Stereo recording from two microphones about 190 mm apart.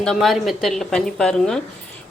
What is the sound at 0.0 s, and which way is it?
Speech, centre (ahead or behind).